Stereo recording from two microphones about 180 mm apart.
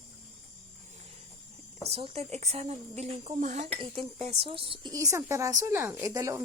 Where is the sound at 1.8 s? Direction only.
30° right (ahead or behind).